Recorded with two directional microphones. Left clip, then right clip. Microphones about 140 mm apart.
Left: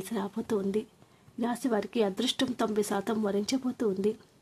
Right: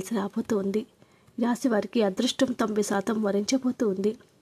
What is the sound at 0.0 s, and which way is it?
Speech, 30° right (ahead or behind).